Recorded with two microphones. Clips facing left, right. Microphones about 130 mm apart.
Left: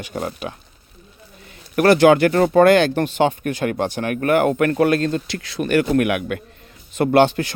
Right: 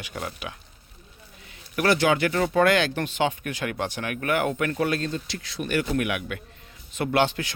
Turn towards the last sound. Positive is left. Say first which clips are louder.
# left 8 dB
turn(degrees=55)  # may be behind; listen again after turning